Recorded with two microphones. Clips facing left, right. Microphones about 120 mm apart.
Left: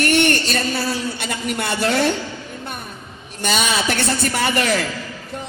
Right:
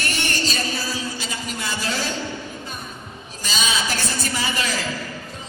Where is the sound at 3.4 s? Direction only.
65° left (ahead or behind).